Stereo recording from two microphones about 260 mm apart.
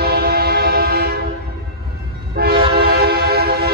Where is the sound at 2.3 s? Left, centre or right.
Right.